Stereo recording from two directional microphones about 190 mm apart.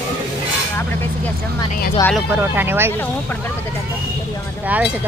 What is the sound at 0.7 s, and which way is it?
Vehicle, 10° left (ahead or behind).